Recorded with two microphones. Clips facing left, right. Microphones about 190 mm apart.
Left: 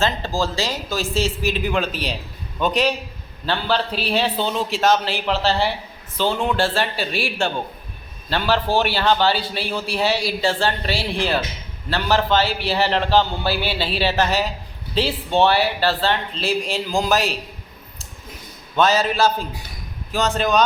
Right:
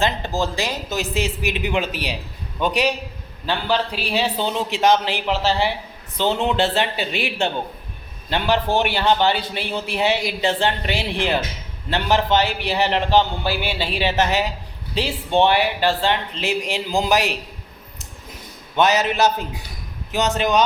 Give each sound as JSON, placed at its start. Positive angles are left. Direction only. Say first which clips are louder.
{"t": 0.0, "sound": "a man's voice", "louder": "even", "side_deg": -20}
{"t": 18.8, "sound": "a man's voice", "louder": "even", "side_deg": -20}